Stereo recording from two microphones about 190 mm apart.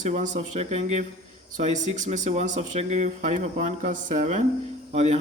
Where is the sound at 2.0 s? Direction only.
40° right (ahead or behind).